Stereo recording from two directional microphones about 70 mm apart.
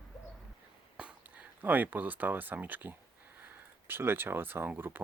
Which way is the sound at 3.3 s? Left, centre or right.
Right.